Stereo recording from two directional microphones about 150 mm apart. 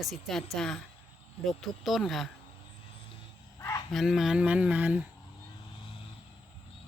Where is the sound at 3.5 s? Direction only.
20° left (ahead or behind).